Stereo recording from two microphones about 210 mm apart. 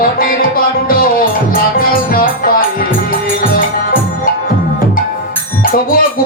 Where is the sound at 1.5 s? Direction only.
45° left (ahead or behind).